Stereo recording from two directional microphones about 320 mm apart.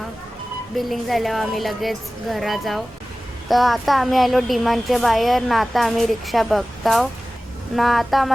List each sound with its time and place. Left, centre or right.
0.8 s speech: centre